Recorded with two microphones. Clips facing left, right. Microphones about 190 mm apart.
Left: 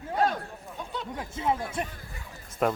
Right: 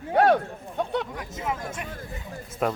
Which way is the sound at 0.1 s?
65° right (ahead or behind).